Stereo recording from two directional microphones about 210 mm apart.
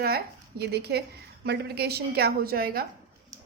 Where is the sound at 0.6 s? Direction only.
50° right (ahead or behind).